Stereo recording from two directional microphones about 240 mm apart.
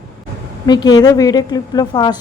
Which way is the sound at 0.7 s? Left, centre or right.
Centre.